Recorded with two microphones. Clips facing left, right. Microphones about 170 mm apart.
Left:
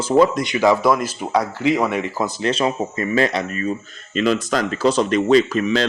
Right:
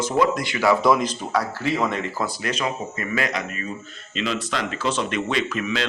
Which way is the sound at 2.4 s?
30° left (ahead or behind).